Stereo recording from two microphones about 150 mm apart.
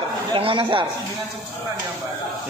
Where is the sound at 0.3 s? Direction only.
35° right (ahead or behind).